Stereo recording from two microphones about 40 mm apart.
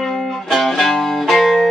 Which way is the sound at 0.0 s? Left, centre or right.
Centre.